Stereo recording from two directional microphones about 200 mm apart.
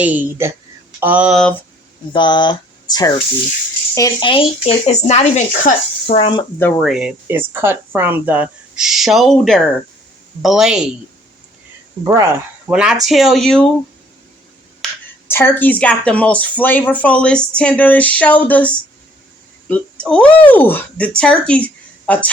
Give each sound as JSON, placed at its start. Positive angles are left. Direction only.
{"t": 0.0, "sound": "a woman's voice", "side_deg": -10}
{"t": 2.1, "sound": "speech", "side_deg": 20}
{"t": 6.8, "sound": "speech", "side_deg": -5}
{"t": 12.0, "sound": "a woman's voice", "side_deg": -15}
{"t": 12.7, "sound": "speech", "side_deg": -5}
{"t": 14.8, "sound": "a sound", "side_deg": 5}
{"t": 15.3, "sound": "speech", "side_deg": 10}